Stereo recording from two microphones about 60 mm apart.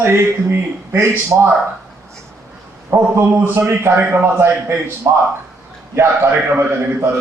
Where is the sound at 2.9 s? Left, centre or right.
Right.